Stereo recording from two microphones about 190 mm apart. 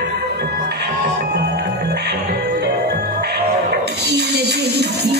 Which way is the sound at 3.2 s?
60° right (ahead or behind).